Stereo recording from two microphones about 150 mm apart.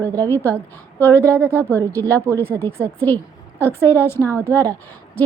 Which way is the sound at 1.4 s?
15° right (ahead or behind).